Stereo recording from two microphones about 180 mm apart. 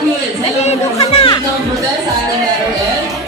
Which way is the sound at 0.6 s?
35° left (ahead or behind).